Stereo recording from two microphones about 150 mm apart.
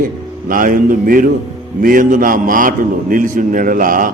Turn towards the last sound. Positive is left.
turn(degrees=-65)  # may be behind; listen again after turning